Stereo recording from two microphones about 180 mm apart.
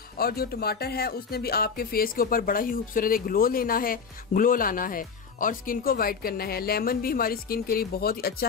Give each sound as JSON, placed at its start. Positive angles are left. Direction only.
{"t": 0.2, "sound": "speech", "side_deg": 60}